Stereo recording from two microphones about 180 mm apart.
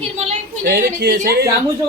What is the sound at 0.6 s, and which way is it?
Speech, 50° right (ahead or behind).